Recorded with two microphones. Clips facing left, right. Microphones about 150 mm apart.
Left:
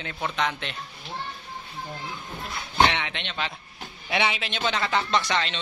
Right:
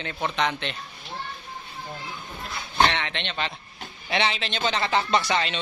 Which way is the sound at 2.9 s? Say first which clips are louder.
Right 1 dB; 10° left (ahead or behind).